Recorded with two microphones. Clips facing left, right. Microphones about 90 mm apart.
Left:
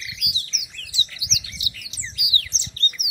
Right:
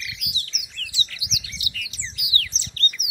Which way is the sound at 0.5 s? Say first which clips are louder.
Right 2 dB; 25° left (ahead or behind).